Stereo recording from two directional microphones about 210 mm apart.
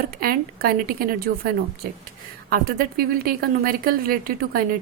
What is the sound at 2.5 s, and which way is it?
A woman's voice, 45° right (ahead or behind).